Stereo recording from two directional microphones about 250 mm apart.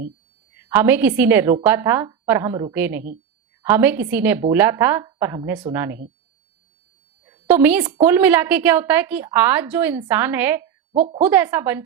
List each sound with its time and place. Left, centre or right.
0.6 s a woman's voice: centre
7.4 s a woman's voice: centre
10.9 s a woman's voice: right
11.3 s a woman's voice: centre